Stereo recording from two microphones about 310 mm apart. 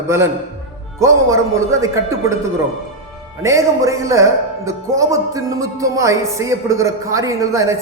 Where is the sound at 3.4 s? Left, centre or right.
Centre.